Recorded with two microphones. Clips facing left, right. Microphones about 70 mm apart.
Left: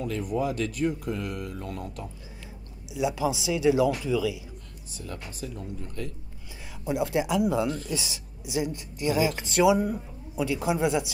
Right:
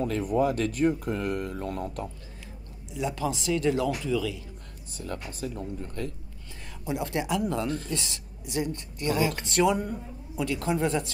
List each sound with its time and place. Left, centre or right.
0.0 s a man's voice: right
2.9 s speech: centre
4.9 s a man's voice: right
6.8 s speech: centre